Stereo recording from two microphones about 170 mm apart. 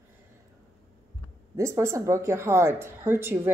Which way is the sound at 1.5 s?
15° right (ahead or behind).